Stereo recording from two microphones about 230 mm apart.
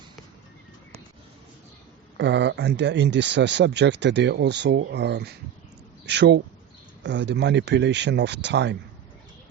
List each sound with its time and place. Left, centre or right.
2.1 s speech: right